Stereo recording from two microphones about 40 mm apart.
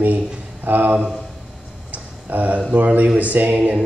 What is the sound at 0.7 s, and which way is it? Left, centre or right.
Speech, right.